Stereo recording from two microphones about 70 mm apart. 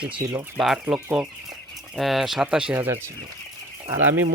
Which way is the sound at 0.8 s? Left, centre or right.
Centre.